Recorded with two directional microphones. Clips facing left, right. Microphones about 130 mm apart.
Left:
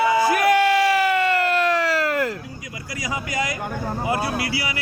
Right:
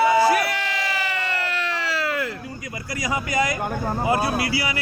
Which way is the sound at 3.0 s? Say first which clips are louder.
Right 3 dB; 60° right (ahead or behind).